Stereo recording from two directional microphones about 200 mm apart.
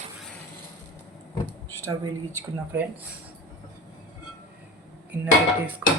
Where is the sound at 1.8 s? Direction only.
15° right (ahead or behind).